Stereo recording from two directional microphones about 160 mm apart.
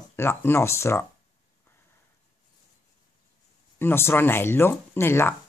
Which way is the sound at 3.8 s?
15° left (ahead or behind).